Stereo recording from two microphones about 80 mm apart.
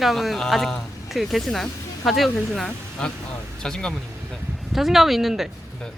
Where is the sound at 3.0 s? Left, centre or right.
Centre.